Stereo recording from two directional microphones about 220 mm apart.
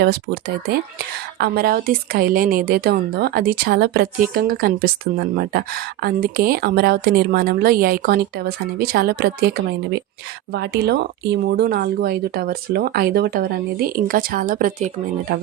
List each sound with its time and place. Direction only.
0.0 s a woman's voice: 45° right (ahead or behind)